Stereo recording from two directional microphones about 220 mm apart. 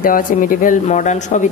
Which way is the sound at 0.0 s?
40° left (ahead or behind).